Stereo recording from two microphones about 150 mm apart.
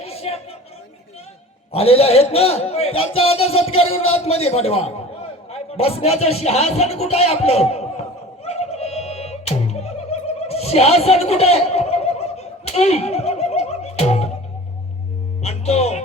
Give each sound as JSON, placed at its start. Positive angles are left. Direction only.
{"t": 0.0, "sound": "a sound", "side_deg": 40}
{"t": 1.7, "sound": "a man's voice", "side_deg": 40}
{"t": 8.4, "sound": "music", "side_deg": 45}
{"t": 15.4, "sound": "speech", "side_deg": 45}